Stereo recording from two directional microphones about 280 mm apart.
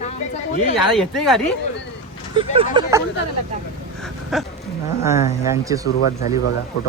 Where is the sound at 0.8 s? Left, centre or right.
Centre.